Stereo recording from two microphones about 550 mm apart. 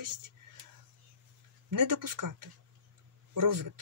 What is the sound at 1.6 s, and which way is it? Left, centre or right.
Speech, right.